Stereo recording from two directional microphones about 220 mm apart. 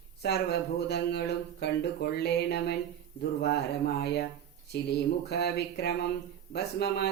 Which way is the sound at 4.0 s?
50° left (ahead or behind).